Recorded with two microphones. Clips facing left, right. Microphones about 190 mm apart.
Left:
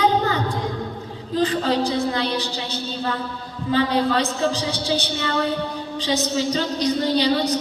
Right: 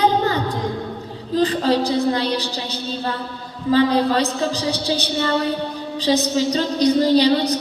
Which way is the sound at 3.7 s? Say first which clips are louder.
Right 4 dB; 35° right (ahead or behind).